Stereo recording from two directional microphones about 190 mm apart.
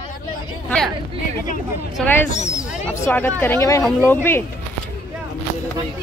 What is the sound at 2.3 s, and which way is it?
Speech, 40° left (ahead or behind).